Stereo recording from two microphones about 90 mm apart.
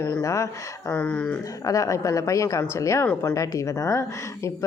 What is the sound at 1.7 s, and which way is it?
A woman's voice, 40° left (ahead or behind).